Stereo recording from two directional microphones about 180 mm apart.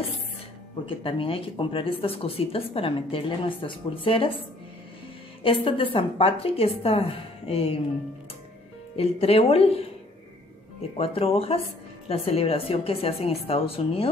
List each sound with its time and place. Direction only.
0.8 s speech: 30° left (ahead or behind)
5.4 s a woman's voice: 30° left (ahead or behind)
8.9 s a woman's voice: 35° left (ahead or behind)
11.0 s a woman's voice: 35° left (ahead or behind)